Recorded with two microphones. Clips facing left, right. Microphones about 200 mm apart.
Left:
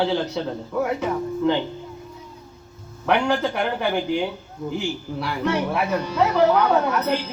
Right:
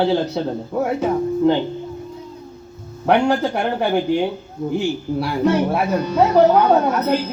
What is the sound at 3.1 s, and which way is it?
Speech, 35° right (ahead or behind).